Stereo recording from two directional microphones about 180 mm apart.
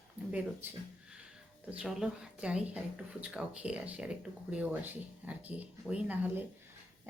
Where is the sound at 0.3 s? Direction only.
10° right (ahead or behind).